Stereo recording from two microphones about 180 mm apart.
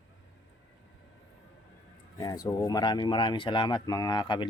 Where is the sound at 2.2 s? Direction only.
20° left (ahead or behind).